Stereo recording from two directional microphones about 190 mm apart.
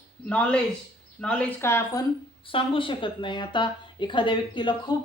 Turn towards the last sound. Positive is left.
turn(degrees=25)  # may be behind; listen again after turning